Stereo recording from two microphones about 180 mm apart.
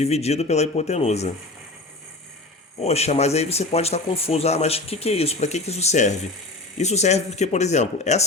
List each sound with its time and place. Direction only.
0.0 s speech: 35° left (ahead or behind)
2.8 s speech: 35° left (ahead or behind)